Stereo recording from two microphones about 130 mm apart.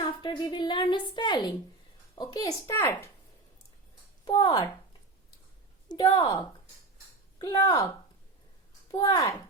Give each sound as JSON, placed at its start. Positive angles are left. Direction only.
{"t": 0.0, "sound": "a sound", "side_deg": 40}
{"t": 2.1, "sound": "speech", "side_deg": 30}
{"t": 4.3, "sound": "speech", "side_deg": 35}
{"t": 5.9, "sound": "speech", "side_deg": 25}
{"t": 8.9, "sound": "speech", "side_deg": 30}